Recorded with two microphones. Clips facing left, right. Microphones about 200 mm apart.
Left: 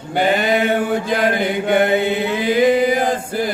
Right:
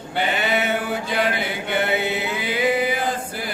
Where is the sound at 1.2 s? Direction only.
45° left (ahead or behind).